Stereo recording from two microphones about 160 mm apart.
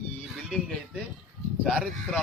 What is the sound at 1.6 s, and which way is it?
Speech, centre (ahead or behind).